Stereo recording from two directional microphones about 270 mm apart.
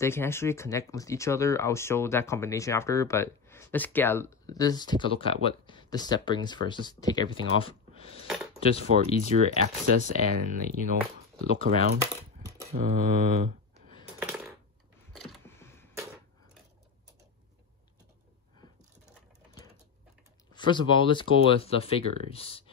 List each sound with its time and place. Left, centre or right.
0.0 s speech: centre
9.3 s speech: right
14.2 s coin: centre
15.1 s a sound: centre
20.5 s speech: centre